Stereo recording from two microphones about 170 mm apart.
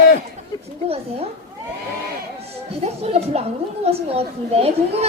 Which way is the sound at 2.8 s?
35° right (ahead or behind).